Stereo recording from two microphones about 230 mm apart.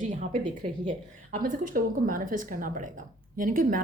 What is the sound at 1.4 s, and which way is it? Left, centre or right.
Speech, right.